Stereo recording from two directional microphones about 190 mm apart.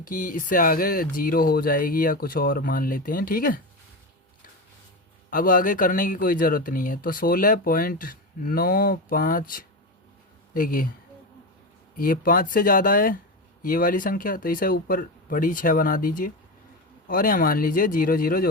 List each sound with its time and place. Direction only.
0.0 s speech: 45° left (ahead or behind)
5.3 s speech: 45° left (ahead or behind)
11.9 s speech: 50° left (ahead or behind)